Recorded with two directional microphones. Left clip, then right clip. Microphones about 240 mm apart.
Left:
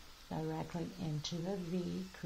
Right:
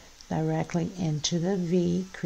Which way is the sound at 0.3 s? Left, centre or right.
Right.